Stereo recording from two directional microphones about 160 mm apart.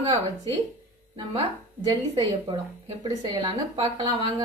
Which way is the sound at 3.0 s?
30° right (ahead or behind).